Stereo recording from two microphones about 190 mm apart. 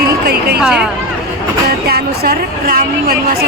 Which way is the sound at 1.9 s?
50° right (ahead or behind).